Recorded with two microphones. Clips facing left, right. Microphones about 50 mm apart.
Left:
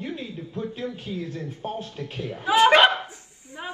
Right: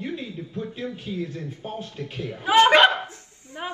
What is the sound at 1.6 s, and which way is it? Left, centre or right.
Speech, left.